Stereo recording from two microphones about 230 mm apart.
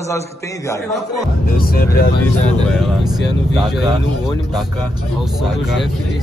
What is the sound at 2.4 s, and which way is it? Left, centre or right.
Speech, centre.